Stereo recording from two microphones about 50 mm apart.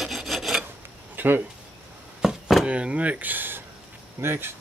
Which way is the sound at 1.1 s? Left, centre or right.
Right.